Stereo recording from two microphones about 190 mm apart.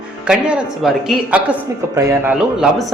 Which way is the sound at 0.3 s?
5° right (ahead or behind).